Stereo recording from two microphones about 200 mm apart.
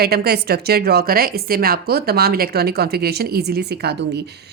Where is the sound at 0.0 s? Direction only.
50° right (ahead or behind).